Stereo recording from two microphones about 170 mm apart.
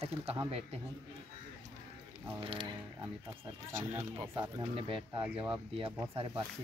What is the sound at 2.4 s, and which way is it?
Speech, 30° right (ahead or behind).